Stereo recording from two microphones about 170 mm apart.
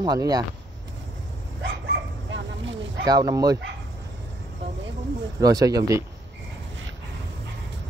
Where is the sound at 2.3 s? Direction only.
90° right.